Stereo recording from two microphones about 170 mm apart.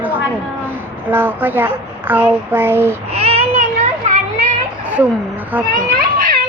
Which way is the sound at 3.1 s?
35° right (ahead or behind).